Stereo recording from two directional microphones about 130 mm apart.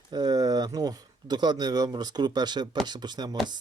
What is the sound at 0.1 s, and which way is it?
Speech, 30° right (ahead or behind).